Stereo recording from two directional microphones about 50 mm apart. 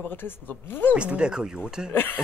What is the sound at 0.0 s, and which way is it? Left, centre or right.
Speech, left.